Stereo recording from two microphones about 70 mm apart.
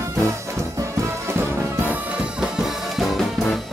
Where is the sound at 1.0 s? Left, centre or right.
Right.